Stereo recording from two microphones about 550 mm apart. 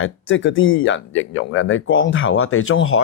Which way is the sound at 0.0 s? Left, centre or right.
Left.